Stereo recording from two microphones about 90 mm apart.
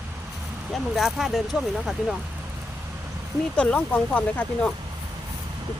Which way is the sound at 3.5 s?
15° left (ahead or behind).